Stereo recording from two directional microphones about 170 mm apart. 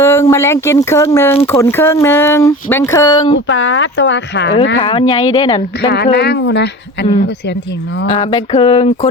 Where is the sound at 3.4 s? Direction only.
90° left.